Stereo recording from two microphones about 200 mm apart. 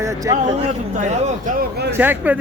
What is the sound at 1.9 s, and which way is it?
Speech, 10° right (ahead or behind).